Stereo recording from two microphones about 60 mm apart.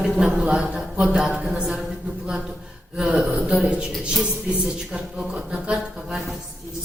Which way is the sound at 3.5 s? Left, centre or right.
Centre.